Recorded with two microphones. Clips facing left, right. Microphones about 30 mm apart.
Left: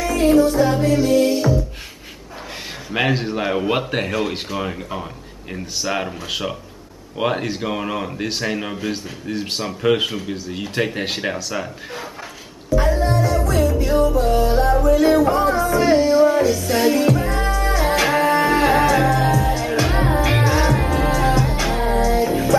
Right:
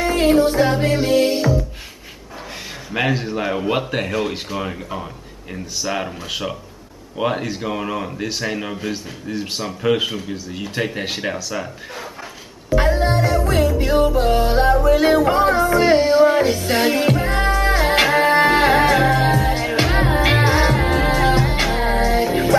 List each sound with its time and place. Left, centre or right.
0.0 s music: right
2.9 s speech: centre
12.6 s music: right